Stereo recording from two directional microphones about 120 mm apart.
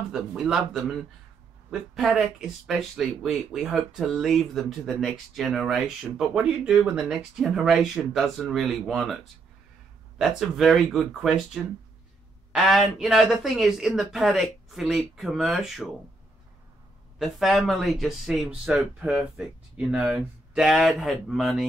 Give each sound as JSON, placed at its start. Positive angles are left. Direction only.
{"t": 0.1, "sound": "speech", "side_deg": -5}
{"t": 17.2, "sound": "speech", "side_deg": 0}